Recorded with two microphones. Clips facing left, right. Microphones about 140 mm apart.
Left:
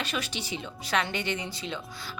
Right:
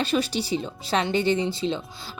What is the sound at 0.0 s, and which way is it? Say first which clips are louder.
A woman's voice: right 9 dB; 30° right (ahead or behind).